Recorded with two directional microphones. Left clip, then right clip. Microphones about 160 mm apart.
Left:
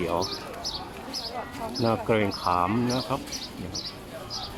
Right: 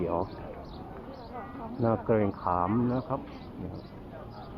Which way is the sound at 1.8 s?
30° left (ahead or behind).